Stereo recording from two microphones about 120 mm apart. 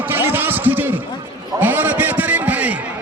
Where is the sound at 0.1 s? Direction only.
15° right (ahead or behind).